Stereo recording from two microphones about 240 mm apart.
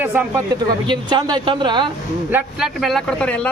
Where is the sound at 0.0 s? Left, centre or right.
Centre.